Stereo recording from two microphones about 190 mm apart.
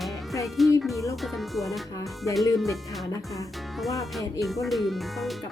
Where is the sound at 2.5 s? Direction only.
Centre (ahead or behind).